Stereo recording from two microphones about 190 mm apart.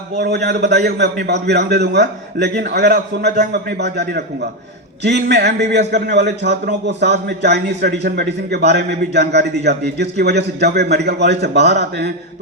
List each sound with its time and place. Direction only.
0.2 s a man's voice: 60° right (ahead or behind)